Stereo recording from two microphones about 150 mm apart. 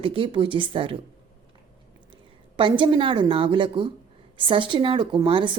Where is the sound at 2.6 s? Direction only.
35° right (ahead or behind).